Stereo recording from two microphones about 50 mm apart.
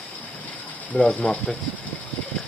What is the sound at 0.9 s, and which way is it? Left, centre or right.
Speech, centre.